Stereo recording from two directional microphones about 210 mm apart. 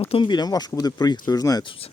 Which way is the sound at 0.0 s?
25° left (ahead or behind).